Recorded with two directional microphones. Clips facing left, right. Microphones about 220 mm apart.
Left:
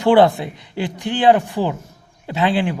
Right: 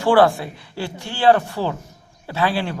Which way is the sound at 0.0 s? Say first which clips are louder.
Left 2 dB; 20° left (ahead or behind).